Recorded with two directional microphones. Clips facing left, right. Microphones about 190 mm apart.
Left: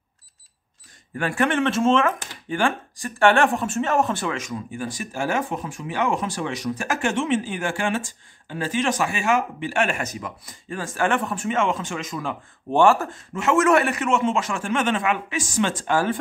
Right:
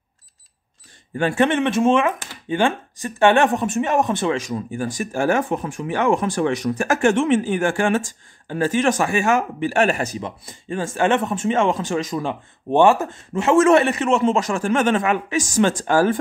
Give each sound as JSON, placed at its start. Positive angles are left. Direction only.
{"t": 1.1, "sound": "speech", "side_deg": -25}